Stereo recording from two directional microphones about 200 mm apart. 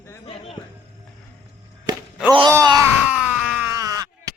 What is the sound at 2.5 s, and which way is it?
Groan, 15° right (ahead or behind).